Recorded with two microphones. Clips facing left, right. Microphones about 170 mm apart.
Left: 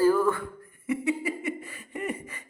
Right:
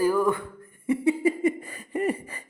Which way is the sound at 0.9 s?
30° right (ahead or behind).